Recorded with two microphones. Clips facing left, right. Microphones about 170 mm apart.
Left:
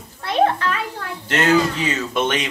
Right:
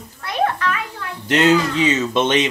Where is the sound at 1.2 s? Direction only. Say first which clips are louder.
Right 2 dB; 15° right (ahead or behind).